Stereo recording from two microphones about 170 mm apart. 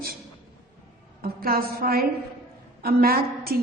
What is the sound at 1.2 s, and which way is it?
A woman's voice, 60° right (ahead or behind).